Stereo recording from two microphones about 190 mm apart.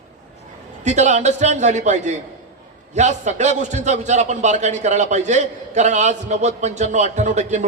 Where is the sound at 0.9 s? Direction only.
40° right (ahead or behind).